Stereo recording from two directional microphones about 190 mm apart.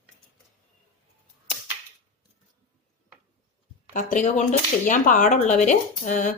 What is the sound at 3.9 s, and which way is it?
Speech, 40° left (ahead or behind).